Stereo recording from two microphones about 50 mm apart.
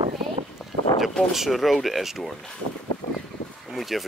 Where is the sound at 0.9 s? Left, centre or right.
Left.